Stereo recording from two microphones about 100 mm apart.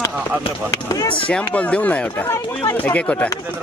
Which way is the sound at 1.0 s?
60° left (ahead or behind).